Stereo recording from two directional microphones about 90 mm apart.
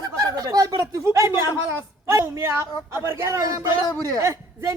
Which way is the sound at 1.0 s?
30° right (ahead or behind).